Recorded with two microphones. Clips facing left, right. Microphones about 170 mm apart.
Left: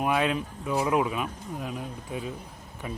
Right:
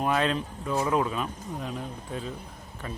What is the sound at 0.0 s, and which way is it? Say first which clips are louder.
Speech: even; 10° left (ahead or behind).